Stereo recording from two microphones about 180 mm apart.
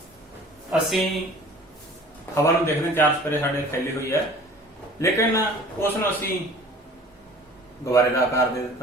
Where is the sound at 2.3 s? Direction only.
15° left (ahead or behind).